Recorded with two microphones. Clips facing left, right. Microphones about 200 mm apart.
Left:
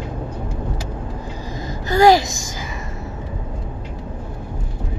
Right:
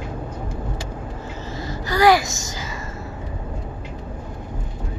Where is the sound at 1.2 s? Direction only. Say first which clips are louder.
Left 1 dB; 15° left (ahead or behind).